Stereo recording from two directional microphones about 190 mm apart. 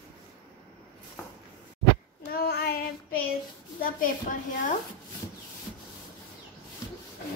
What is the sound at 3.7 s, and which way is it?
A woman's voice, 50° left (ahead or behind).